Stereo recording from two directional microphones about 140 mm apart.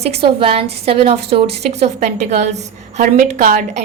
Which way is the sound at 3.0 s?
70° right (ahead or behind).